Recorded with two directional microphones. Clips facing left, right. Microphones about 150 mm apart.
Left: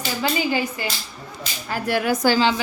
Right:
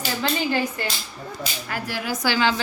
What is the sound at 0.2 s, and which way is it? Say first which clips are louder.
Speech: left 2 dB; 10° left (ahead or behind).